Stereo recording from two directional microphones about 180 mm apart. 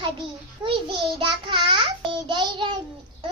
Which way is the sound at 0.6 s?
25° right (ahead or behind).